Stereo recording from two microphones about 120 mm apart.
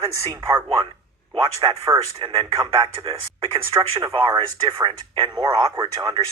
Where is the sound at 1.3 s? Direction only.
45° right (ahead or behind).